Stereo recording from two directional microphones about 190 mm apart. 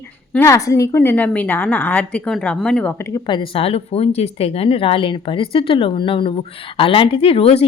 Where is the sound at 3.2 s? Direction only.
25° left (ahead or behind).